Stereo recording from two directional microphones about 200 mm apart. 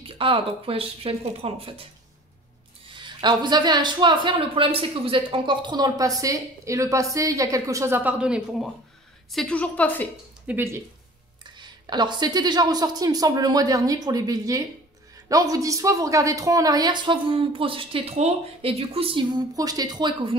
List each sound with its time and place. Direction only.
0.0 s speech: 25° right (ahead or behind)
2.9 s a woman's voice: 25° right (ahead or behind); by 10.0 s 10° left (ahead or behind)
10.4 s speech: 10° right (ahead or behind)
11.6 s speech: 20° right (ahead or behind)